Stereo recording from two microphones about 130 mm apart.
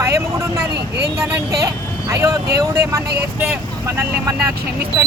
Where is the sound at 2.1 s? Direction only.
25° right (ahead or behind).